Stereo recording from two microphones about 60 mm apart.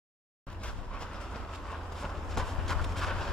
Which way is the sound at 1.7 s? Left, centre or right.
Centre.